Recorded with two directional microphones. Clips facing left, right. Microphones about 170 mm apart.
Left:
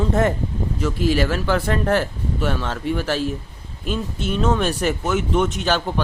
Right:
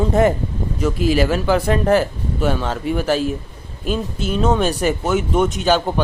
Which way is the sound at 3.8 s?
35° right (ahead or behind).